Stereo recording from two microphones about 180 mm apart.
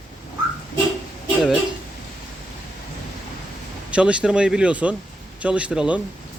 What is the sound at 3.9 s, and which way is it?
Speech, 5° right (ahead or behind).